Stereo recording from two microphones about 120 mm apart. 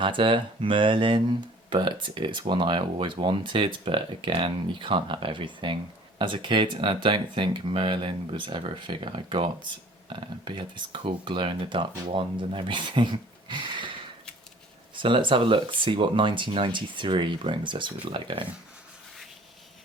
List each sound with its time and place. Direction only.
0.0 s speech: 45° right (ahead or behind)